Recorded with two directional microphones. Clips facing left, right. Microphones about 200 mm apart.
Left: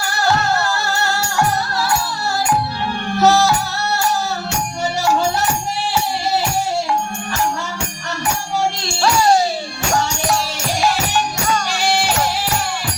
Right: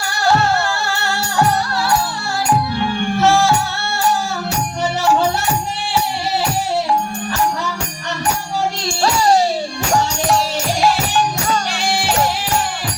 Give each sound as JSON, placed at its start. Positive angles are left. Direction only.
{"t": 3.2, "sound": "music", "side_deg": 40}